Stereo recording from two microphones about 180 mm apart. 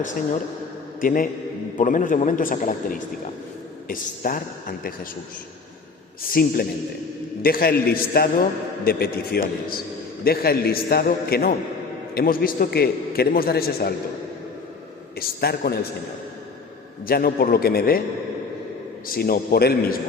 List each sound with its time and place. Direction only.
1.0 s a man's voice: 50° left (ahead or behind)
6.3 s a man's voice: 55° left (ahead or behind)
15.2 s a man's voice: 60° left (ahead or behind)
17.1 s a man's voice: 55° left (ahead or behind)
19.0 s a man's voice: 55° left (ahead or behind)